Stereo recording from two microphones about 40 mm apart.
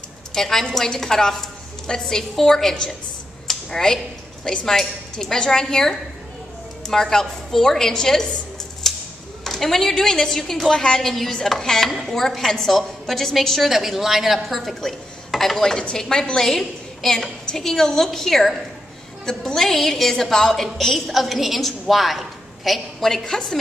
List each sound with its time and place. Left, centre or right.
0.3 s a woman's voice: centre
3.4 s a sound: centre
4.6 s a woman's voice: centre
8.8 s typewriter: centre
9.4 s a woman's voice: centre
13.7 s a woman's voice: centre
23.0 s a woman's voice: centre